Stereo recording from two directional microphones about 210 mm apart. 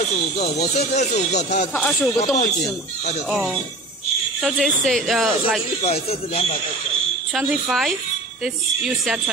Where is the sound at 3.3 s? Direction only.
Centre (ahead or behind).